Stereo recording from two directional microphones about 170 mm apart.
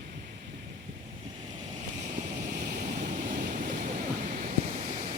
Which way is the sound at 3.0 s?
45° right (ahead or behind).